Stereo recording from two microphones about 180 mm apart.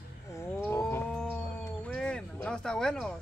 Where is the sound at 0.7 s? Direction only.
10° left (ahead or behind).